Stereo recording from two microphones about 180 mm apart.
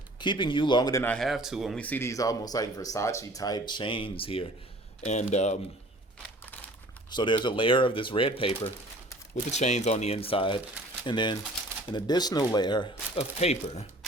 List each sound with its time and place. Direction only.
0.2 s speech: 25° left (ahead or behind)
1.0 s speech: 5° left (ahead or behind); by 5.5 s 40° left (ahead or behind)
7.1 s speech: 25° left (ahead or behind)